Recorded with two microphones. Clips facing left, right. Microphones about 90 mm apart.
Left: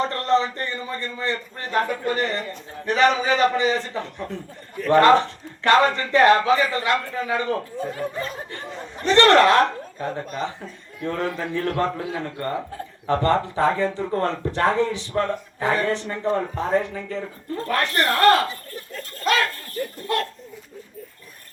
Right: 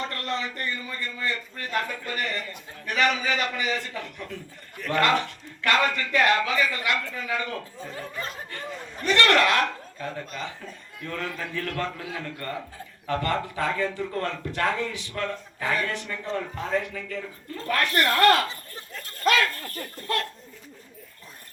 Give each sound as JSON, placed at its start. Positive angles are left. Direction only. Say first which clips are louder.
{"t": 0.0, "sound": "speech", "louder": "left 10 dB", "side_deg": 30}